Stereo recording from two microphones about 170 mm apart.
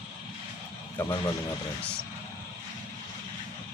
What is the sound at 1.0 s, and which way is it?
Speech, 10° left (ahead or behind).